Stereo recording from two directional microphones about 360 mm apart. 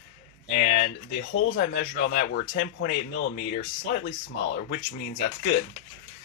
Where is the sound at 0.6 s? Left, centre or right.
Left.